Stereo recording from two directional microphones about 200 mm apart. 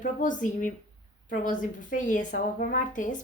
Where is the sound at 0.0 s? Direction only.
40° left (ahead or behind).